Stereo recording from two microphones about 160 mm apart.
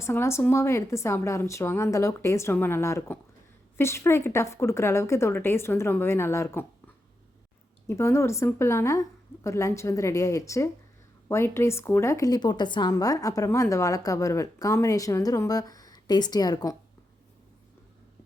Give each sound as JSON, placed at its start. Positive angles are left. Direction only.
{"t": 0.0, "sound": "a woman's voice", "side_deg": 15}